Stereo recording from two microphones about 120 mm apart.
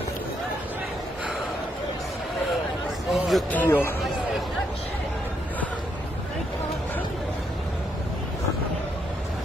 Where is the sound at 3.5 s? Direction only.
15° left (ahead or behind).